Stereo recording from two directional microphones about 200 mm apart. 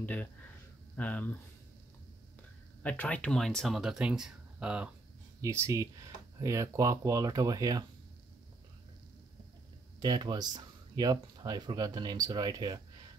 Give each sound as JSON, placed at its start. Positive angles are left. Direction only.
{"t": 0.0, "sound": "speech", "side_deg": 5}
{"t": 2.8, "sound": "speech", "side_deg": 5}
{"t": 9.9, "sound": "speech", "side_deg": -20}